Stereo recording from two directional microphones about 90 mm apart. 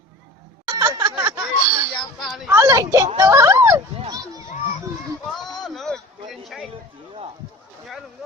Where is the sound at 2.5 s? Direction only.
35° right (ahead or behind).